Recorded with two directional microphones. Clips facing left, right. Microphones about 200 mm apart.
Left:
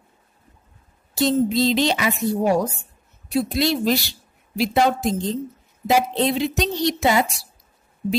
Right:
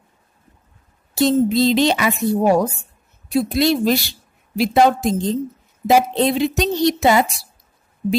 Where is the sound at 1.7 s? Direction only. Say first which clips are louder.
Right 4 dB; 55° right (ahead or behind).